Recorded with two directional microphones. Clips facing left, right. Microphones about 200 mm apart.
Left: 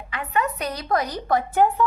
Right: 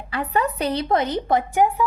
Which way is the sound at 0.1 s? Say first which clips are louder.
Right 2 dB; 35° right (ahead or behind).